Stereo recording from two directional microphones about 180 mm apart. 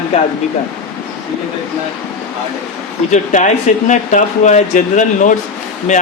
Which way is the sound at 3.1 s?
40° left (ahead or behind).